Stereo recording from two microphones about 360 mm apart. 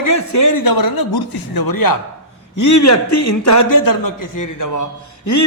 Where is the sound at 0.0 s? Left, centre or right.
Left.